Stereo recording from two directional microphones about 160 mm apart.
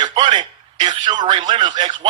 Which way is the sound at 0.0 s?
25° right (ahead or behind).